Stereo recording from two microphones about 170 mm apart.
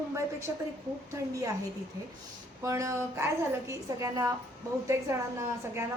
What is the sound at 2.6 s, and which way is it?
A woman's voice, 20° right (ahead or behind).